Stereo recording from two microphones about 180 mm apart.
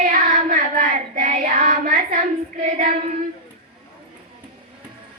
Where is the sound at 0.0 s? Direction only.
45° right (ahead or behind).